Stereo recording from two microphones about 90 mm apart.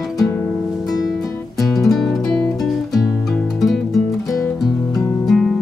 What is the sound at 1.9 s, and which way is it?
Music, centre (ahead or behind).